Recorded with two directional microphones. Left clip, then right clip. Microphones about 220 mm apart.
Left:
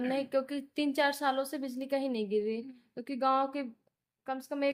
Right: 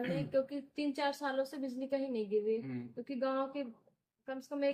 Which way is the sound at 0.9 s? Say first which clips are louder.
Left 6 dB; 50° left (ahead or behind).